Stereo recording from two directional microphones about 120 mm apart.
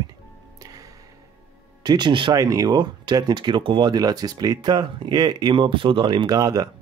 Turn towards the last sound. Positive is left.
turn(degrees=-30)  # may be behind; listen again after turning